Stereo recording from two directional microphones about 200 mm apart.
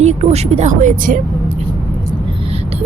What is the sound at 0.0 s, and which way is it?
Speech, 35° right (ahead or behind).